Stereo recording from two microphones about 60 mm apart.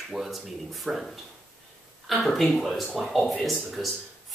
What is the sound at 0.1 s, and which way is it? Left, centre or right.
Speech, centre.